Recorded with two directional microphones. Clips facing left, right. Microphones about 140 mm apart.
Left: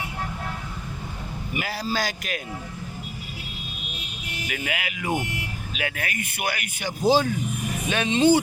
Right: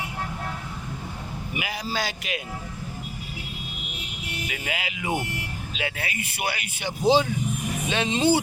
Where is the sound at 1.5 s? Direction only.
15° right (ahead or behind).